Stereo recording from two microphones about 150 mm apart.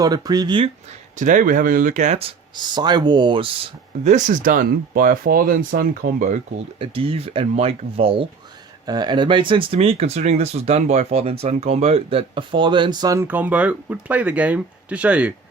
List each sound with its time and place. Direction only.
0.0 s speech: 25° right (ahead or behind)
1.1 s speech: 55° right (ahead or behind); by 4.1 s 40° right (ahead or behind)
4.1 s speech: 60° right (ahead or behind)
6.7 s speech: 40° right (ahead or behind); by 15.3 s 10° right (ahead or behind)